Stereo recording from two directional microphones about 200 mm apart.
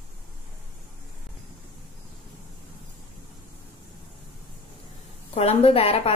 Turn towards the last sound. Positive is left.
turn(degrees=30)  # may be behind; listen again after turning